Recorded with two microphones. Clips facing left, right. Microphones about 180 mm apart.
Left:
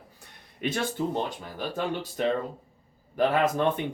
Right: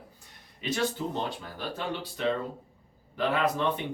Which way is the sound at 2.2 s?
50° left (ahead or behind).